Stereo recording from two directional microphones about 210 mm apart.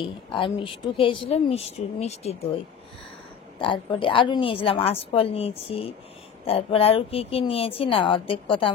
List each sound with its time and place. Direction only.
0.0 s speech: 25° left (ahead or behind)
3.5 s speech: 25° left (ahead or behind)